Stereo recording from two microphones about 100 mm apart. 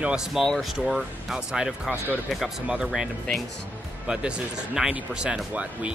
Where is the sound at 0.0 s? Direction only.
5° right (ahead or behind).